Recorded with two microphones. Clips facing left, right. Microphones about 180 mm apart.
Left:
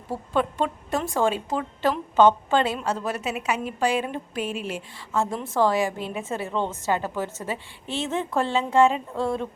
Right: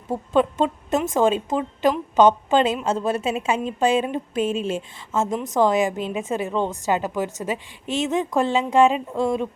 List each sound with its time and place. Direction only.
0.1 s a woman's voice: 20° right (ahead or behind)